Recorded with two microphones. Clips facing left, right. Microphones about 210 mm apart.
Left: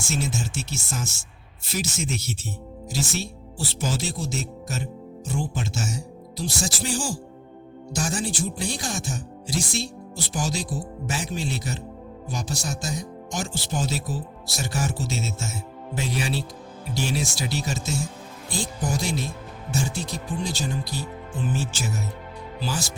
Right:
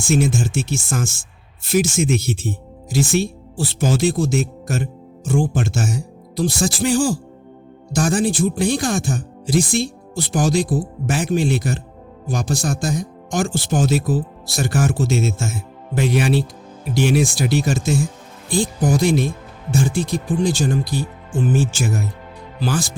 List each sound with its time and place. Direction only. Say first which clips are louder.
0.0 s speech: right 10 dB; 55° right (ahead or behind)